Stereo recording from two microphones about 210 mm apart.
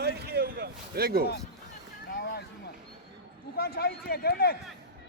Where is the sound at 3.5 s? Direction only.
50° left (ahead or behind).